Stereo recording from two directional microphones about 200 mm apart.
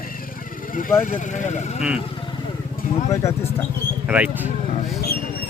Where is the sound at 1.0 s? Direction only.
40° left (ahead or behind).